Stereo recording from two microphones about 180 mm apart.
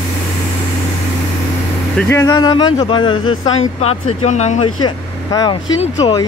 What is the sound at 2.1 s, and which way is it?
Speech, 20° left (ahead or behind).